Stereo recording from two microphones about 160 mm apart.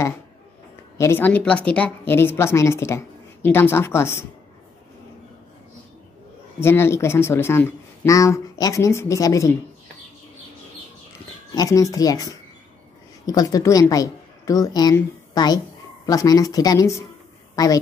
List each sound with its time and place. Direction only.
0.9 s speech: 15° left (ahead or behind)
6.6 s speech: 15° left (ahead or behind)
11.5 s a woman's voice: 20° left (ahead or behind)